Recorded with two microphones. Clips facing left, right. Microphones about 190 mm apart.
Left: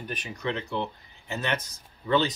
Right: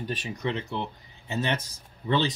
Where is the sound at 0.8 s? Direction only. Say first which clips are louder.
Left 2 dB; 25° right (ahead or behind).